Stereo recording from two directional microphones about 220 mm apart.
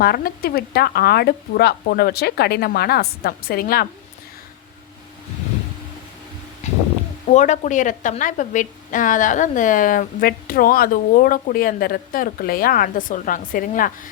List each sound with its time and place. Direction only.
0.0 s speech: 45° left (ahead or behind)
6.6 s a sound: 30° left (ahead or behind)
7.3 s a woman's voice: 30° left (ahead or behind)